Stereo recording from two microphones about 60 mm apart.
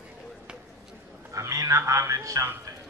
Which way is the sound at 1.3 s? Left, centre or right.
Right.